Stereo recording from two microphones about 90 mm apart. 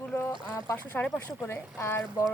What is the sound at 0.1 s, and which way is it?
Boat, 25° left (ahead or behind).